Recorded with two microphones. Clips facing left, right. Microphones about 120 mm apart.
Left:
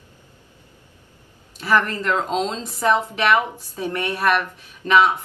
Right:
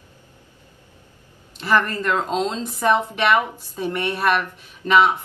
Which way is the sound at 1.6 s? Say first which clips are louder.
Even; centre (ahead or behind).